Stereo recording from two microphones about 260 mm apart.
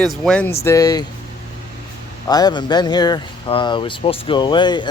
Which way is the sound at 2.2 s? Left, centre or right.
Centre.